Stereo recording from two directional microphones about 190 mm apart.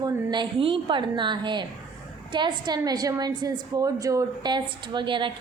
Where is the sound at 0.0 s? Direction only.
25° right (ahead or behind).